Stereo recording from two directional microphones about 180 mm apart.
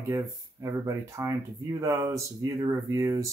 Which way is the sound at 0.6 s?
15° right (ahead or behind).